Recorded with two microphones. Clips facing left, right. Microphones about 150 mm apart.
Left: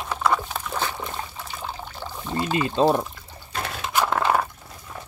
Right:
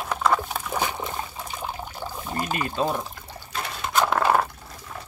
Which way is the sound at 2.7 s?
30° left (ahead or behind).